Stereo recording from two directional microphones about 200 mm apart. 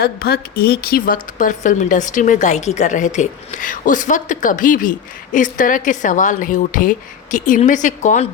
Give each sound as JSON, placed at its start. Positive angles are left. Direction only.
{"t": 0.0, "sound": "a woman's voice", "side_deg": 50}